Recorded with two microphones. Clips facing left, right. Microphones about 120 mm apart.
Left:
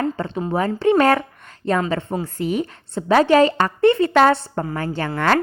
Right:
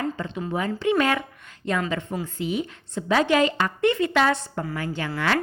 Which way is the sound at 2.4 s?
45° left (ahead or behind).